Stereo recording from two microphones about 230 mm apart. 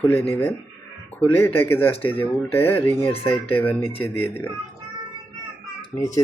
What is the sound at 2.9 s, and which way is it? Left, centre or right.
Speech, left.